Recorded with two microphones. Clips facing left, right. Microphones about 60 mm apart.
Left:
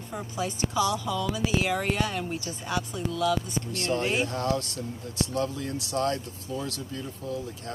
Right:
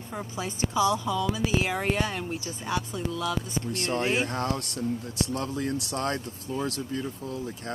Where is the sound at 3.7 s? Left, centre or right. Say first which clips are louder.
Even; right.